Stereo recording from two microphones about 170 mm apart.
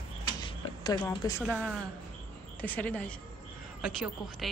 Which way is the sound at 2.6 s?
10° left (ahead or behind).